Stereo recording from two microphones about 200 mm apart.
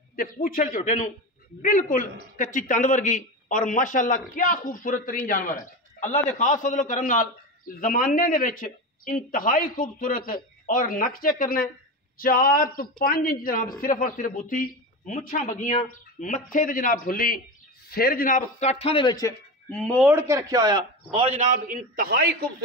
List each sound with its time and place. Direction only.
0.1 s a man's voice: 45° left (ahead or behind); by 19.3 s 20° left (ahead or behind)
19.7 s speech: 5° left (ahead or behind)
20.1 s a man's voice: 15° right (ahead or behind); by 22.2 s 45° right (ahead or behind)